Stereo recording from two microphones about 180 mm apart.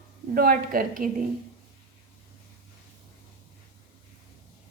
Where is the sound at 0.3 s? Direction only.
55° right (ahead or behind).